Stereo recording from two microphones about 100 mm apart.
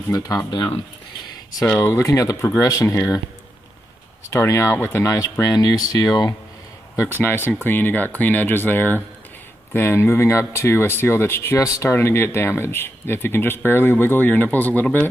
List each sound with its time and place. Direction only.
0.1 s speech: 35° left (ahead or behind)
0.5 s speech: 50° left (ahead or behind)
1.8 s speech: 25° left (ahead or behind)
4.3 s speech: 30° left (ahead or behind)
7.2 s speech: 20° left (ahead or behind)